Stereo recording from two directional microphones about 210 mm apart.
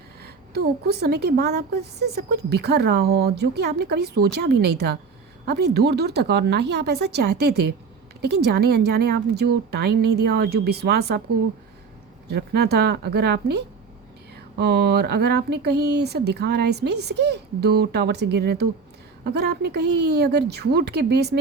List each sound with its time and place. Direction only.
0.2 s a woman's voice: 50° right (ahead or behind)
12.3 s a woman's voice: 50° right (ahead or behind)